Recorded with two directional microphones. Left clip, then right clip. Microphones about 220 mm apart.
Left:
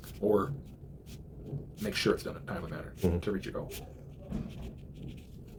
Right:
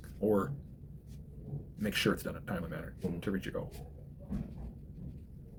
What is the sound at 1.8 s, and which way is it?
Speech, 40° right (ahead or behind).